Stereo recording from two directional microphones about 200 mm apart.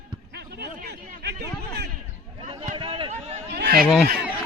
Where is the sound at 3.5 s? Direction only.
50° right (ahead or behind).